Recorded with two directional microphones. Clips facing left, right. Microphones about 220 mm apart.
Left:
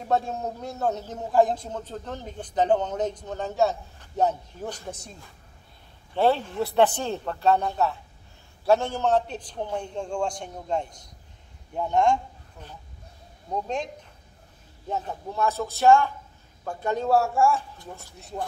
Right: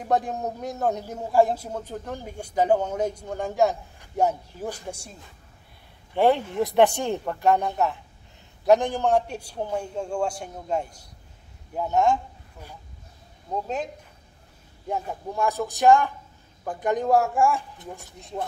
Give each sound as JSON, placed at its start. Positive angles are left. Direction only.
{"t": 0.0, "sound": "a man's voice", "side_deg": -15}
{"t": 6.1, "sound": "a man's voice", "side_deg": -15}
{"t": 14.9, "sound": "a man's voice", "side_deg": -15}